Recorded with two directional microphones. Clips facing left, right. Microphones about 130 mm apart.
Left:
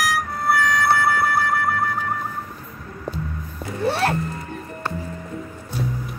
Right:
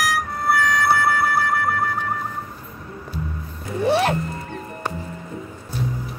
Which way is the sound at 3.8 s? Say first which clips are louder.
Right 2 dB; 15° right (ahead or behind).